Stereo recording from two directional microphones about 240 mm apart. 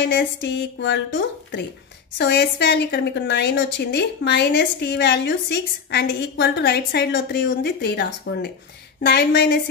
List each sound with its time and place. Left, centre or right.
0.0 s a woman's voice: left